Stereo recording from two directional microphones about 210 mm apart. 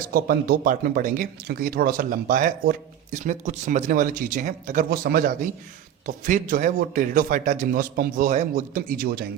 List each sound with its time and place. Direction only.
0.0 s speech: 45° right (ahead or behind)